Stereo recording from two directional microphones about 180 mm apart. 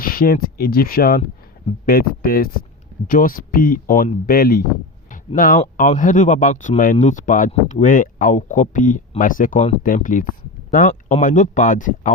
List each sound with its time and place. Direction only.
0.0 s speech: 55° left (ahead or behind)